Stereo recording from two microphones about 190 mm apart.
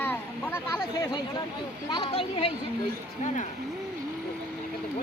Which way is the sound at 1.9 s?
25° left (ahead or behind).